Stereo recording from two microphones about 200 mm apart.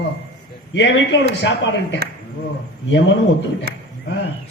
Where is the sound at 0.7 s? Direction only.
65° left (ahead or behind).